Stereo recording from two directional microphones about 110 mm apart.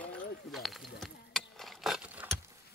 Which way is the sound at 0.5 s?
Centre (ahead or behind).